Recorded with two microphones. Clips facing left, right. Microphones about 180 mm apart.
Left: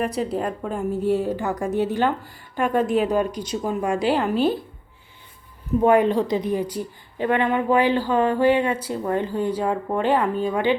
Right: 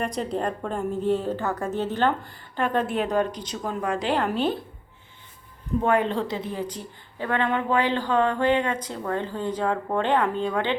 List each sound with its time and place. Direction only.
0.0 s a woman's voice: 5° left (ahead or behind)
5.8 s a woman's voice: 10° left (ahead or behind)